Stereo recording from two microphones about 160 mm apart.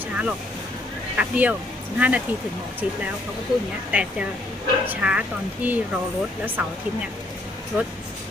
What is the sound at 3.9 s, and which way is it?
Speech, 10° right (ahead or behind).